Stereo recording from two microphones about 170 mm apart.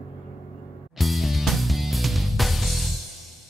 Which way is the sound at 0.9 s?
Centre (ahead or behind).